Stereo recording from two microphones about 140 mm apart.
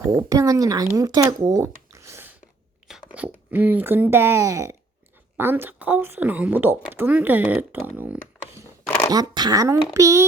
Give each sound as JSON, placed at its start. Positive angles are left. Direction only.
{"t": 0.1, "sound": "speech", "side_deg": -25}
{"t": 9.0, "sound": "speech", "side_deg": -25}